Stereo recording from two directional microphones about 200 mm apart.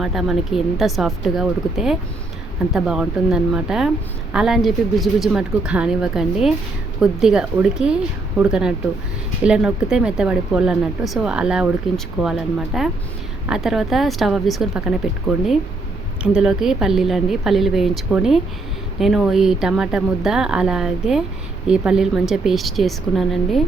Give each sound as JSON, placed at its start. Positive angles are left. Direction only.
{"t": 0.0, "sound": "speech", "side_deg": 0}
{"t": 16.2, "sound": "speech", "side_deg": -5}